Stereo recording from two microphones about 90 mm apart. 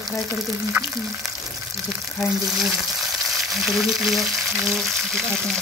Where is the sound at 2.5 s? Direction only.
5° right (ahead or behind).